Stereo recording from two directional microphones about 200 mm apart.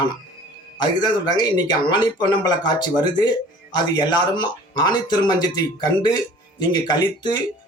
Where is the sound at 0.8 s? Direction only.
20° left (ahead or behind).